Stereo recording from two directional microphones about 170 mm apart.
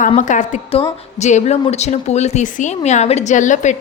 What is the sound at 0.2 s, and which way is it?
A woman's voice, 45° left (ahead or behind).